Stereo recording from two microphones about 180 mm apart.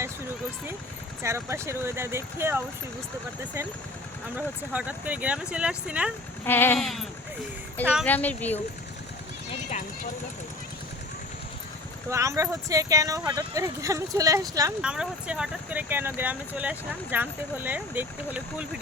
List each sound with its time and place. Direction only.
1.2 s speech: 15° right (ahead or behind)
4.4 s speech: 10° right (ahead or behind)
6.4 s speech: 10° left (ahead or behind)
8.0 s speech: 10° left (ahead or behind)
9.5 s horse: 40° left (ahead or behind)
12.1 s speech: 15° right (ahead or behind)
14.8 s speech: 5° right (ahead or behind)